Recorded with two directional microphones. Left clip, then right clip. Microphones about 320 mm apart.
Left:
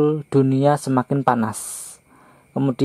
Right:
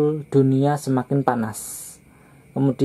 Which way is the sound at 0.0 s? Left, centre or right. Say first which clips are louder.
Left 1 dB; centre.